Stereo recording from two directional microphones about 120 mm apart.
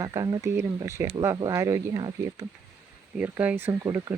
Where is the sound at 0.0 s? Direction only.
30° right (ahead or behind).